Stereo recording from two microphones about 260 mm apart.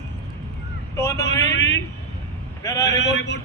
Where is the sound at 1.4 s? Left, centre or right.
Left.